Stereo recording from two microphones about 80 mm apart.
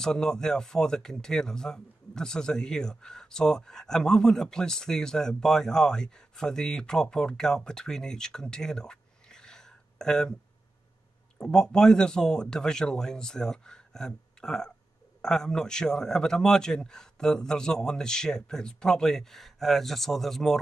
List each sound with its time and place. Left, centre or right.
0.0 s speech: centre
11.3 s speech: centre